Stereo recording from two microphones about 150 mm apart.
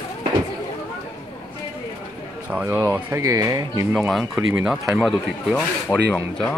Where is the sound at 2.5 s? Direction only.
15° right (ahead or behind).